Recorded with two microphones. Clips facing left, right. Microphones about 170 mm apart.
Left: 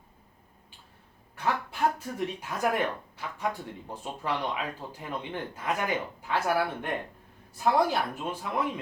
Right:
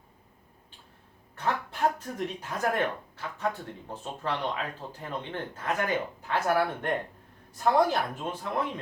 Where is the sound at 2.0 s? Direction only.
10° left (ahead or behind).